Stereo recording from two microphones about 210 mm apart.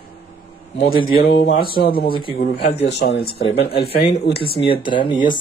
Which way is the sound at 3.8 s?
50° left (ahead or behind).